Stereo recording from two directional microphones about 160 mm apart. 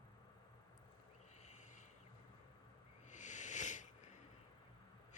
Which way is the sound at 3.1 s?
50° left (ahead or behind).